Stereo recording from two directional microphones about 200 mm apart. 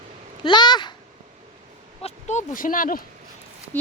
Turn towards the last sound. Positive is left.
turn(degrees=10)  # may be behind; listen again after turning